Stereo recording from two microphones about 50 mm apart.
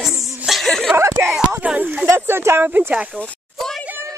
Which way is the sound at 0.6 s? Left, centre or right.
Centre.